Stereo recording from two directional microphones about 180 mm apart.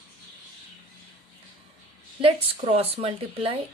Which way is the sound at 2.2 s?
35° right (ahead or behind).